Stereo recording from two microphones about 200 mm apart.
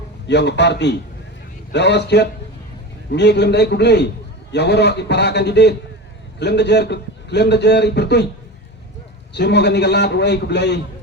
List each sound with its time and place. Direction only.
0.3 s a man's voice: 60° left (ahead or behind)
9.3 s a man's voice: 55° left (ahead or behind)